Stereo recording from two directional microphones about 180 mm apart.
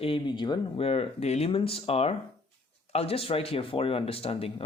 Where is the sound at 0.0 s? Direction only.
30° left (ahead or behind).